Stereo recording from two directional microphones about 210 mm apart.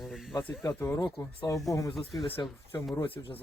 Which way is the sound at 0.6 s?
15° left (ahead or behind).